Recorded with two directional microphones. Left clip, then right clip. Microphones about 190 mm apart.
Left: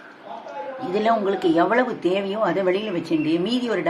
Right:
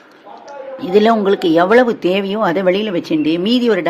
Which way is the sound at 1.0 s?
55° right (ahead or behind).